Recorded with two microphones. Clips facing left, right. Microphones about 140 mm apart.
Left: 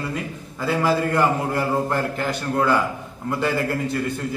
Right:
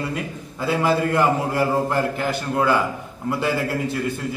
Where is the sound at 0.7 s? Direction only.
15° right (ahead or behind).